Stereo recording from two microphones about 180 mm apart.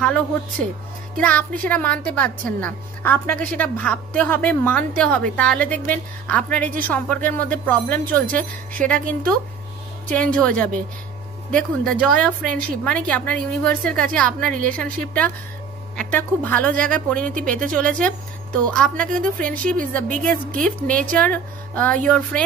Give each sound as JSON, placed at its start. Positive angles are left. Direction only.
{"t": 0.0, "sound": "a woman's voice", "side_deg": 5}
{"t": 8.3, "sound": "speech", "side_deg": -50}
{"t": 8.8, "sound": "a woman's voice", "side_deg": 5}
{"t": 10.1, "sound": "a woman's voice", "side_deg": 5}